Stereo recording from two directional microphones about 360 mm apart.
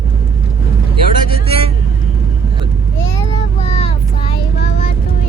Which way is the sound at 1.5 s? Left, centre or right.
Centre.